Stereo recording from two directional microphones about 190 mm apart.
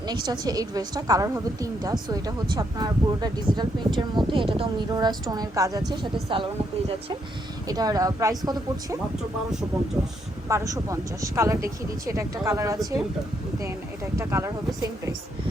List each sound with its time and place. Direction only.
0.0 s a woman's voice: 20° right (ahead or behind)
9.5 s speech: 5° right (ahead or behind)
10.5 s speech: 15° right (ahead or behind)